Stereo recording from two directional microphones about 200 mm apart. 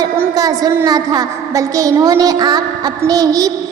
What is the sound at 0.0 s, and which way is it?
A woman's voice, 20° right (ahead or behind).